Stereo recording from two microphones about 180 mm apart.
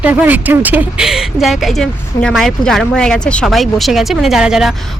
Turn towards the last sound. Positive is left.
turn(degrees=-5)  # may be behind; listen again after turning